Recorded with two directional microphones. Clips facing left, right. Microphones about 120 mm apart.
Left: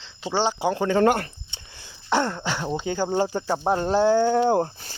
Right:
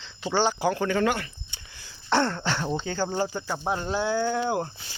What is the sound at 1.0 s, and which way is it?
Speech, 45° left (ahead or behind).